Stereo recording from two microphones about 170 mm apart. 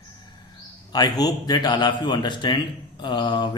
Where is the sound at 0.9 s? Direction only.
25° left (ahead or behind).